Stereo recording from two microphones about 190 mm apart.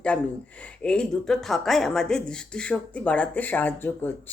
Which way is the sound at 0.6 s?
5° left (ahead or behind).